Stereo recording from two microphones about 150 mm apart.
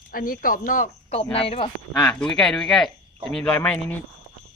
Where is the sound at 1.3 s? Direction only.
40° left (ahead or behind).